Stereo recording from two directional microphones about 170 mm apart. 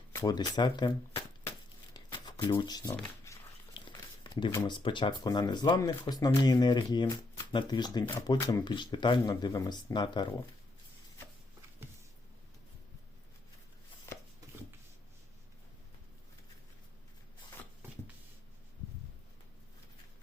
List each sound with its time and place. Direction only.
0.1 s speech: 20° left (ahead or behind)
1.9 s shuffling cards: 25° left (ahead or behind)
3.3 s a sound: 15° left (ahead or behind)
3.8 s speech: 25° left (ahead or behind)